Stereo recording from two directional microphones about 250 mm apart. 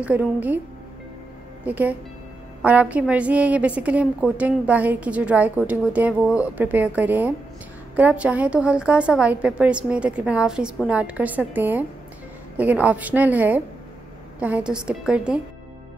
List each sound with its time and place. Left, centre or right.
0.0 s a woman's voice: centre
1.6 s a woman's voice: centre